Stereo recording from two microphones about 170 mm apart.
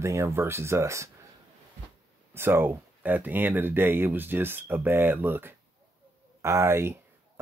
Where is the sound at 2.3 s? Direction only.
15° right (ahead or behind).